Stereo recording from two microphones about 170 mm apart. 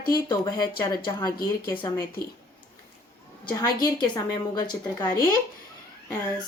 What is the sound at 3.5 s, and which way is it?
Speech, 25° left (ahead or behind).